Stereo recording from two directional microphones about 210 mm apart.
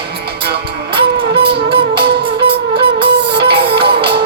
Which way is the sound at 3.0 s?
55° right (ahead or behind).